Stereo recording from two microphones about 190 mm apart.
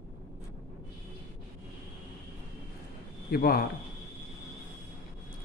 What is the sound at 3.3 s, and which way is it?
Speech, 55° left (ahead or behind).